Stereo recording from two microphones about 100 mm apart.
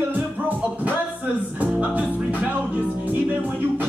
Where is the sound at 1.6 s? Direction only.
15° right (ahead or behind).